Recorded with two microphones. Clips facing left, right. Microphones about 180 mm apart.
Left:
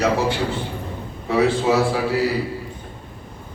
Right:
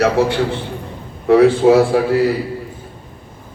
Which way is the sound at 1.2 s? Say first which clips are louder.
Right 8 dB; 60° right (ahead or behind).